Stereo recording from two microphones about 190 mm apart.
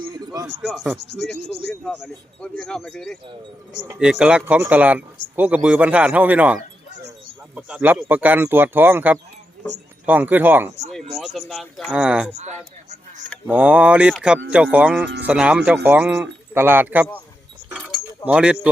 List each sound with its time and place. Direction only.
0.1 s a sound: 20° right (ahead or behind)
0.7 s speech: centre (ahead or behind)
0.9 s cricket: 60° left (ahead or behind)
1.9 s speech: 5° left (ahead or behind)
11.3 s speech: centre (ahead or behind)
13.5 s speech: 10° right (ahead or behind)
18.3 s speech: 5° right (ahead or behind)